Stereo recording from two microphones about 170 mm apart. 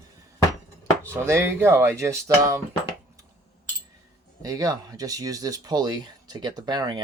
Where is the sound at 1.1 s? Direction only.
15° right (ahead or behind).